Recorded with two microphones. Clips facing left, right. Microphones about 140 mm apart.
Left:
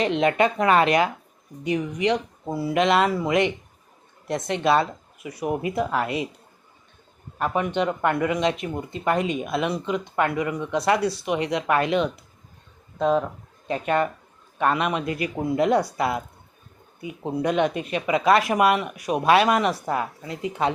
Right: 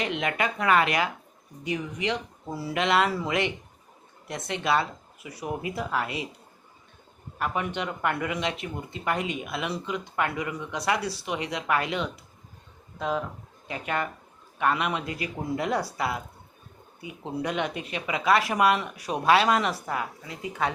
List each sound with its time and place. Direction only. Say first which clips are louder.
0.2 s speech: left 8 dB; 25° left (ahead or behind)
7.3 s speech: left 6 dB; 25° left (ahead or behind)
9.1 s speech: left 7 dB; 20° right (ahead or behind)
9.4 s speech: left 6 dB; 20° left (ahead or behind)
15.0 s speech: left 6 dB; 25° right (ahead or behind)
15.5 s speech: left 7 dB; 20° left (ahead or behind)
17.2 s speech: left 7 dB; 20° left (ahead or behind)
17.7 s speech: left 7 dB; 20° right (ahead or behind)
18.0 s speech: left 4 dB; 20° left (ahead or behind)